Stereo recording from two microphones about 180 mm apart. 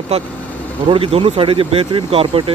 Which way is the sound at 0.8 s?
30° right (ahead or behind).